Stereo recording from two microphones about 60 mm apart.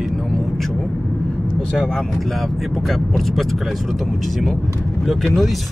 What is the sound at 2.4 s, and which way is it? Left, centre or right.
Speech, centre.